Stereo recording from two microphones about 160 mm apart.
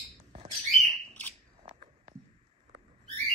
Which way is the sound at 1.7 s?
35° right (ahead or behind).